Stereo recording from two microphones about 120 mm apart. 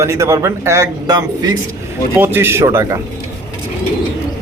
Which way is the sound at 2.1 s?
15° right (ahead or behind).